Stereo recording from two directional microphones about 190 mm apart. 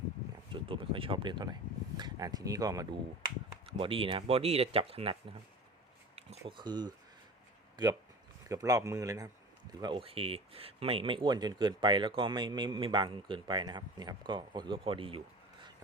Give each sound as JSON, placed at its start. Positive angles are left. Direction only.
{"t": 0.5, "sound": "speech", "side_deg": -25}
{"t": 6.1, "sound": "speech", "side_deg": -30}
{"t": 8.4, "sound": "speech", "side_deg": -20}